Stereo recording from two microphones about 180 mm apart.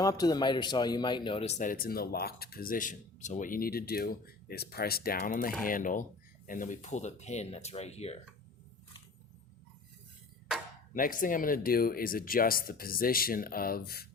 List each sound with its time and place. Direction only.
0.0 s a man's voice: 20° left (ahead or behind)
10.9 s a man's voice: 50° left (ahead or behind)